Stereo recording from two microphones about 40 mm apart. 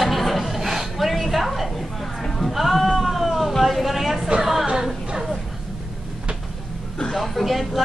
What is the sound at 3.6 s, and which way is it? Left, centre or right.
A woman's voice, centre.